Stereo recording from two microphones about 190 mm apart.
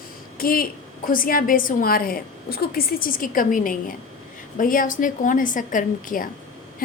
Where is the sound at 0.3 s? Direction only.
50° left (ahead or behind).